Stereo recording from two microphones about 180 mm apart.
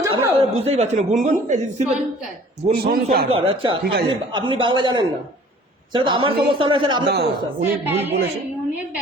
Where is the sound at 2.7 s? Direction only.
55° right (ahead or behind).